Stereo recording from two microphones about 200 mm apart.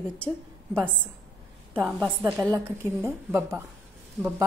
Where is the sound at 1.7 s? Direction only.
Centre (ahead or behind).